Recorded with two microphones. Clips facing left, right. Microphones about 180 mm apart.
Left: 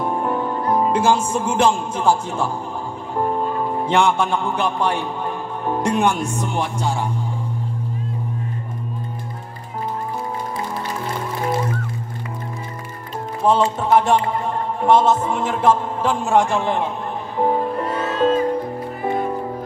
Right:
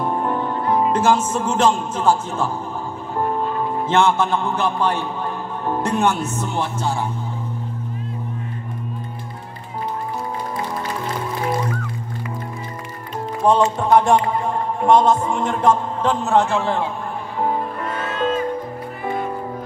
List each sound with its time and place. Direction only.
0.0 s music: 10° left (ahead or behind)
0.9 s a man's voice: 10° left (ahead or behind)
3.8 s a man's voice: 15° left (ahead or behind)
13.7 s music: 5° left (ahead or behind)
14.8 s a man's voice: 5° left (ahead or behind)
17.4 s music: 30° left (ahead or behind)